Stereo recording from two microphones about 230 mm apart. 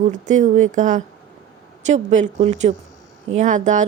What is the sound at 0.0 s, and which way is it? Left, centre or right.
Speech, right.